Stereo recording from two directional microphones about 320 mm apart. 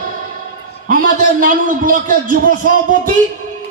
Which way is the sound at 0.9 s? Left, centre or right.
Right.